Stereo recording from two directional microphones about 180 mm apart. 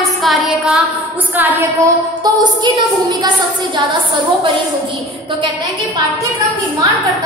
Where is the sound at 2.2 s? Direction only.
20° right (ahead or behind).